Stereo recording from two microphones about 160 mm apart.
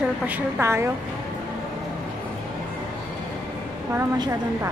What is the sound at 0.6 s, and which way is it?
Speech, 15° right (ahead or behind).